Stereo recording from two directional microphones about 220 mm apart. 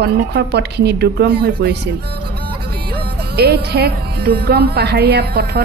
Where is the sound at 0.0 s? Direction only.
45° right (ahead or behind).